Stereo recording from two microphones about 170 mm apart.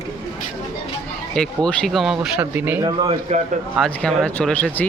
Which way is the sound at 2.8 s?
30° right (ahead or behind).